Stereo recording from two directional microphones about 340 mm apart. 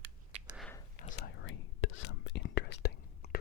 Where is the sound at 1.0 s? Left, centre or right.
Left.